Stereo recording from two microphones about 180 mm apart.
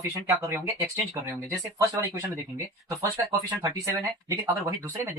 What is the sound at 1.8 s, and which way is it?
Speech, 20° right (ahead or behind).